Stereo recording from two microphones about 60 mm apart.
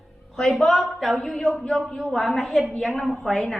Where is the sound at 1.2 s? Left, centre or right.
Centre.